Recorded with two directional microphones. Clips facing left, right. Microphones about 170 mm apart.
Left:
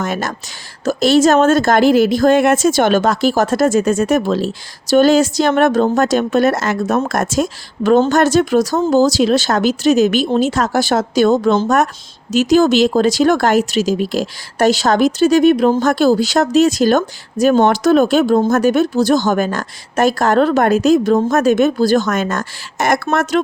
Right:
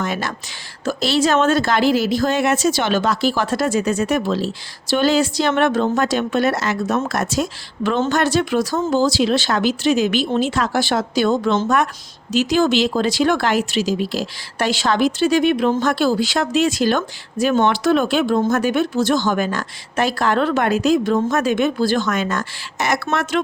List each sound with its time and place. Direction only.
0.0 s speech: 45° left (ahead or behind)